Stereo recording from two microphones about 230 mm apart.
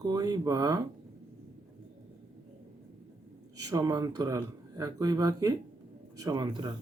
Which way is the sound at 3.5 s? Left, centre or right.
Centre.